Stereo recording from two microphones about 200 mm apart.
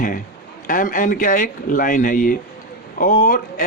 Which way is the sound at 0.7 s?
45° left (ahead or behind).